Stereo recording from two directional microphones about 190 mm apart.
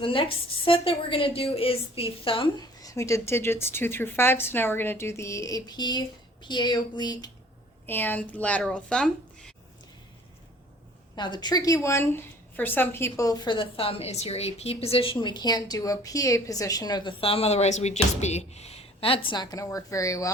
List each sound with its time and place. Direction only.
0.0 s a woman's voice: 30° left (ahead or behind)
7.9 s speech: 10° left (ahead or behind)
11.1 s a woman's voice: 20° left (ahead or behind)